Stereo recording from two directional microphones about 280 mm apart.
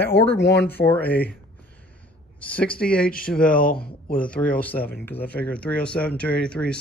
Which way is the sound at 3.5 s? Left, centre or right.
Left.